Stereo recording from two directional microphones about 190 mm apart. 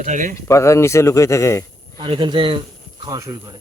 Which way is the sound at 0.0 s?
40° right (ahead or behind).